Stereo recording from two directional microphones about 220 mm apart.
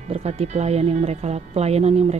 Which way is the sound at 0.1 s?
30° right (ahead or behind).